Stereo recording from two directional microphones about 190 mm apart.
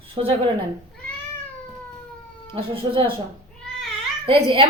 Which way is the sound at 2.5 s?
30° right (ahead or behind).